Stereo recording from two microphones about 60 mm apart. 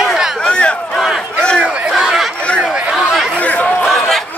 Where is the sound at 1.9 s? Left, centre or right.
Centre.